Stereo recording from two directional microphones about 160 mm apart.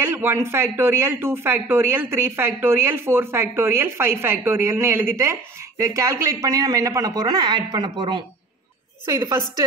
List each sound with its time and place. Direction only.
0.0 s speech: 15° right (ahead or behind)